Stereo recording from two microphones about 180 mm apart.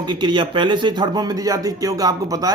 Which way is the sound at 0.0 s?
25° right (ahead or behind).